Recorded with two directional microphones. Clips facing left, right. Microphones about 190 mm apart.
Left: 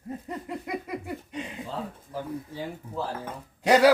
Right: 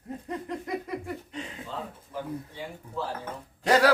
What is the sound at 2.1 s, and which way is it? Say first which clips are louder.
Speech: left 1 dB; 40° left (ahead or behind).